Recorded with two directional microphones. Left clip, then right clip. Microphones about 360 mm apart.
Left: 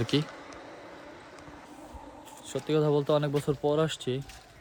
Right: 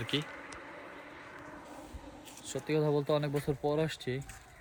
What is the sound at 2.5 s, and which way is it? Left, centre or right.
Speech, centre.